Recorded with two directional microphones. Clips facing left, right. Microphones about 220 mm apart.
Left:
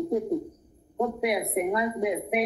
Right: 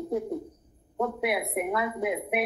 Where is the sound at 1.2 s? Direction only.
5° right (ahead or behind).